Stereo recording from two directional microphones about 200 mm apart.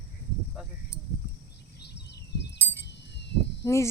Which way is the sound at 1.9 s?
55° left (ahead or behind).